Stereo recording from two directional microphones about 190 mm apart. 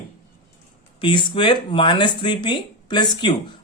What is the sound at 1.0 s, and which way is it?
Speech, 25° left (ahead or behind).